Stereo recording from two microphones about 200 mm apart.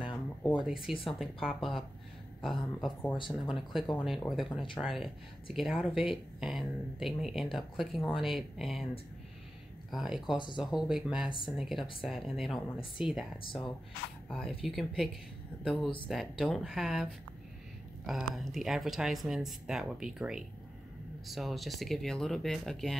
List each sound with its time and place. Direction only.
0.4 s a sound: centre (ahead or behind)
1.0 s speech: centre (ahead or behind)
9.8 s speech: centre (ahead or behind)
10.3 s speech: 25° left (ahead or behind)
10.6 s speech: 5° right (ahead or behind)
11.2 s speech: 25° left (ahead or behind)
11.5 s speech: centre (ahead or behind)
14.6 s speech: centre (ahead or behind)